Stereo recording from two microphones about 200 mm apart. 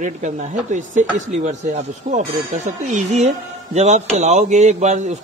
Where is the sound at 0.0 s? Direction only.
35° right (ahead or behind).